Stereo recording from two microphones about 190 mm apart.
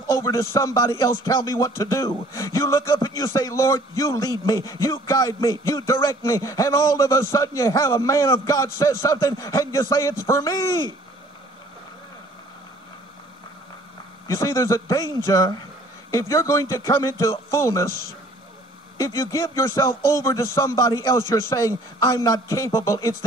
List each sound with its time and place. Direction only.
0.0 s a man's voice: 15° left (ahead or behind)
14.2 s a man's voice: 15° left (ahead or behind)
18.9 s a man's voice: 15° left (ahead or behind)